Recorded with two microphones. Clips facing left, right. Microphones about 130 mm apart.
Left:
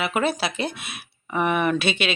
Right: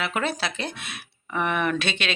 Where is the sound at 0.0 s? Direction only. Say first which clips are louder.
Left 4 dB; 10° left (ahead or behind).